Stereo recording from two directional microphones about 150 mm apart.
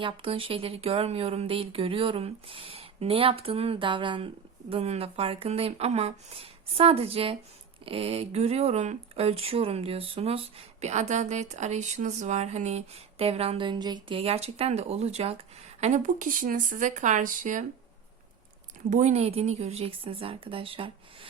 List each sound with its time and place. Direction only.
0.0 s speech: 35° right (ahead or behind)
15.8 s speech: 55° right (ahead or behind)
18.9 s speech: 55° right (ahead or behind); by 21.2 s 35° right (ahead or behind)